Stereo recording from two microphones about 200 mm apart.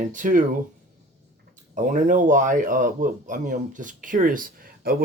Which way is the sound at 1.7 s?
40° right (ahead or behind).